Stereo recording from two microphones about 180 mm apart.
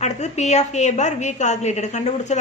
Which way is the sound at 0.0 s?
40° left (ahead or behind).